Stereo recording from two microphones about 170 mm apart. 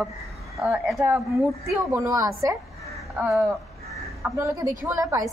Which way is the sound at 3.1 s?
Centre (ahead or behind).